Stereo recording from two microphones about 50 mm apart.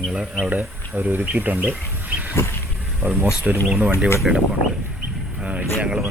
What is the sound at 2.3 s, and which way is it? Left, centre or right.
Vehicle, left.